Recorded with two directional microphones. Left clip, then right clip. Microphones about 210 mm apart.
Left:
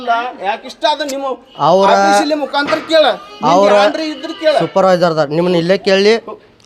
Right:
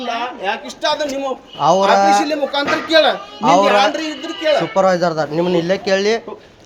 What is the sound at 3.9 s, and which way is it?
Speech, 10° left (ahead or behind).